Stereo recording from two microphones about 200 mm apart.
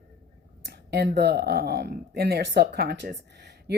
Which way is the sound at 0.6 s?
50° right (ahead or behind).